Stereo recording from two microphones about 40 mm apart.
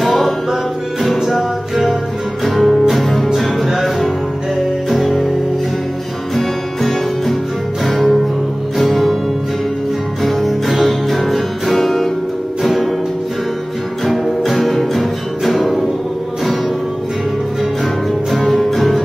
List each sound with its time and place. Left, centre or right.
0.0 s music: centre
4.8 s music: centre
6.3 s music: centre
10.2 s music: centre
14.0 s music: centre
18.3 s music: centre